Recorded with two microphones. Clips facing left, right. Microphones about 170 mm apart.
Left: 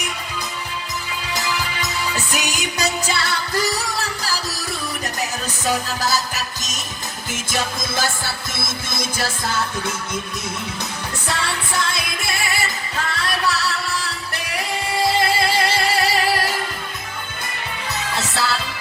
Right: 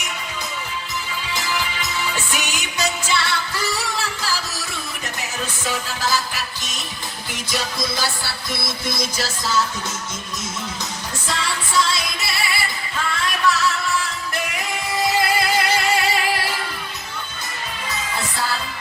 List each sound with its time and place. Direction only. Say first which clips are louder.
1.3 s music: left 1 dB; 40° left (ahead or behind)
5.6 s music: left 4 dB; 40° left (ahead or behind); by 9.6 s 55° left (ahead or behind)
11.3 s music: left 1 dB; 60° left (ahead or behind)
13.0 s music: right 1 dB; 40° left (ahead or behind)
17.8 s music: left 2 dB; 75° left (ahead or behind)